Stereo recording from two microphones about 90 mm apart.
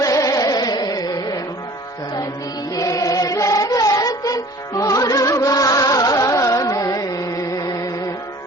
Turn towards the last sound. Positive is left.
turn(degrees=40)  # may be behind; listen again after turning